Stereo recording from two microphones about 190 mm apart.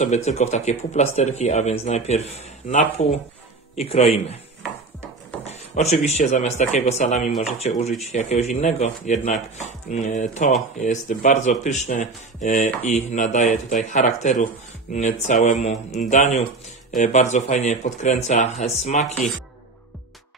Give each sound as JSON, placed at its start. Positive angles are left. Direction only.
{"t": 0.0, "sound": "speech", "side_deg": 35}
{"t": 5.4, "sound": "speech", "side_deg": 35}